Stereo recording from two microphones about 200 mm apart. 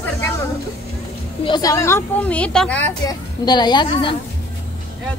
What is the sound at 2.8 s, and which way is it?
A woman's voice, 20° left (ahead or behind).